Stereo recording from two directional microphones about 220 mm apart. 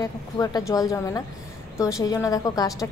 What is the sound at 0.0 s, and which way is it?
A woman's voice, 15° left (ahead or behind).